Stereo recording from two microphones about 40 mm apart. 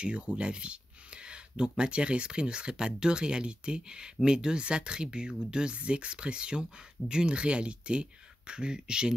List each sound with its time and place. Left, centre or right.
0.0 s speech: right